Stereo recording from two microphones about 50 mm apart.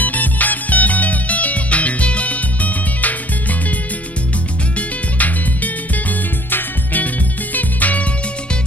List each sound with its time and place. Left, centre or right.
0.0 s music: left
4.7 s music: left